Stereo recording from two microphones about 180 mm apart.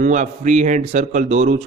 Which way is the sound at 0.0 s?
45° right (ahead or behind).